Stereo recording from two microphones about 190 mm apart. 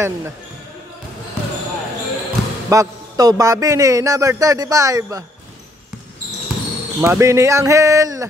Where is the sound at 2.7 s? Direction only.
20° right (ahead or behind).